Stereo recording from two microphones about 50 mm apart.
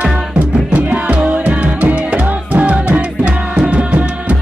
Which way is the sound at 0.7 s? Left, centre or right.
Right.